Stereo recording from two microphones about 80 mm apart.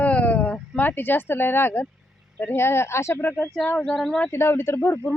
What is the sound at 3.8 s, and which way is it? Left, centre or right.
Speech, centre.